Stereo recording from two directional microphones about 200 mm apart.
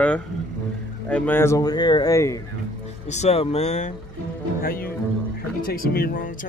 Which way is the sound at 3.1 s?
35° left (ahead or behind).